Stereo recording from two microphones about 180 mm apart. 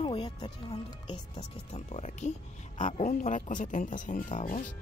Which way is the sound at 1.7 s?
40° left (ahead or behind).